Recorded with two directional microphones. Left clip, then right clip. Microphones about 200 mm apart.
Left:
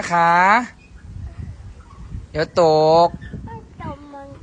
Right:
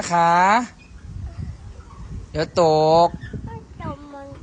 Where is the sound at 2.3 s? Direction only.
10° right (ahead or behind).